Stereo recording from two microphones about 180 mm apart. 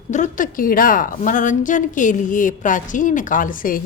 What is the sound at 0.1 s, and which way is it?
A woman's voice, 45° left (ahead or behind).